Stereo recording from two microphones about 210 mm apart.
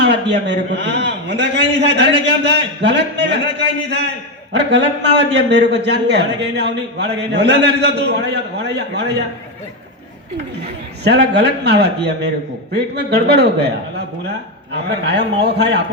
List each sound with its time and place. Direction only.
0.0 s a man's voice: 55° right (ahead or behind)
11.0 s a man's voice: 55° right (ahead or behind)
14.8 s a man's voice: 55° right (ahead or behind)